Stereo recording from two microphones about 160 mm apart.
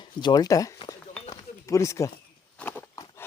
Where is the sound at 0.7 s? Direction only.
25° left (ahead or behind).